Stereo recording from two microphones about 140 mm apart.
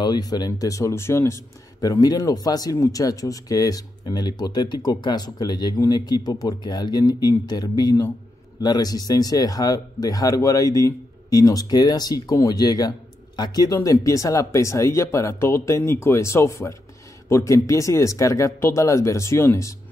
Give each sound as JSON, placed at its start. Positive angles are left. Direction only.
{"t": 0.0, "sound": "speech", "side_deg": 30}